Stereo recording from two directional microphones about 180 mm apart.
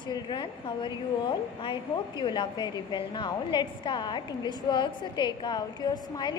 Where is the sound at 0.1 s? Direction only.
25° left (ahead or behind).